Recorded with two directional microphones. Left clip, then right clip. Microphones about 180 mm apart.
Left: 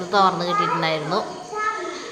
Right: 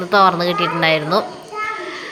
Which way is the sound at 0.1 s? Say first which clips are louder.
Right 5 dB; 25° right (ahead or behind).